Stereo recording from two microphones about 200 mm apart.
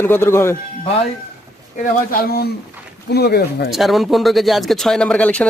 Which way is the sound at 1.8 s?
45° left (ahead or behind).